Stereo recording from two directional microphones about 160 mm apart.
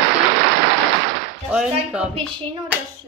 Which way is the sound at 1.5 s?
5° right (ahead or behind).